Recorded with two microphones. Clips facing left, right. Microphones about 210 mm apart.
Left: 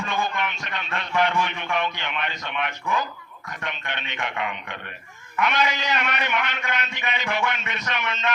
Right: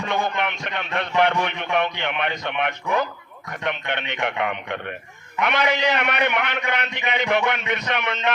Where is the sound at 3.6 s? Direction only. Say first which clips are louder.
Right 7 dB; 60° right (ahead or behind).